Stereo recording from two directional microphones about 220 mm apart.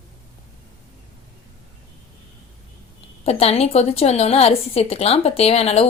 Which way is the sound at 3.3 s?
25° left (ahead or behind).